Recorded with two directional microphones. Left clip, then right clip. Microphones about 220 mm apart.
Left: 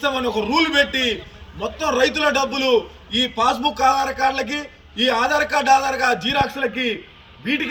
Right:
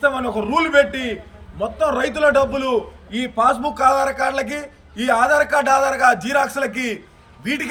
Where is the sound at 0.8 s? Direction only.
10° right (ahead or behind).